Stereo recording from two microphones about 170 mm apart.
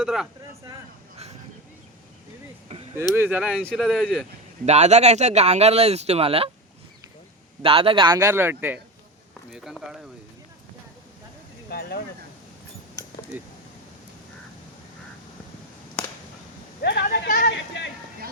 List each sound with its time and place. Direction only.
0.0 s speech: 5° right (ahead or behind)
3.2 s speech: 10° right (ahead or behind)
4.6 s speech: 40° right (ahead or behind)
7.6 s a man's voice: 35° right (ahead or behind); by 10.1 s centre (ahead or behind)
11.7 s speech: 60° left (ahead or behind)
16.8 s speech: 70° left (ahead or behind)
17.2 s speech: 55° left (ahead or behind)
17.7 s a sound: 90° left